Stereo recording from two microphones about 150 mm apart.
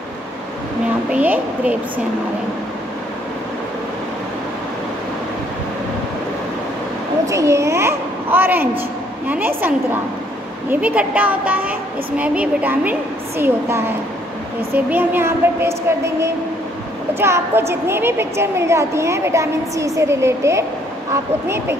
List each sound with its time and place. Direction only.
1.1 s a woman's voice: 10° right (ahead or behind)
7.2 s a sound: 20° right (ahead or behind)
9.3 s a woman's voice: 15° right (ahead or behind)
10.7 s a woman's voice: 10° right (ahead or behind)